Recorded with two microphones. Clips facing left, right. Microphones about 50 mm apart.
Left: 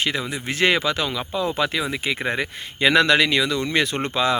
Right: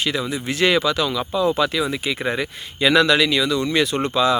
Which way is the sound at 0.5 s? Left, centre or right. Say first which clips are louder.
Right 2 dB; left.